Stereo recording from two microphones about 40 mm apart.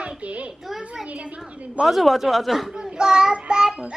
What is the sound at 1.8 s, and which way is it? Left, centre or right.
Speech, centre.